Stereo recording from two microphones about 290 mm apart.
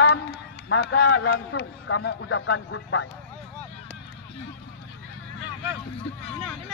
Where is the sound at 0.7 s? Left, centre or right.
Left.